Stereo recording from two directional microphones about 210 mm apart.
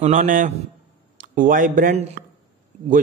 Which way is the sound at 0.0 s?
40° right (ahead or behind).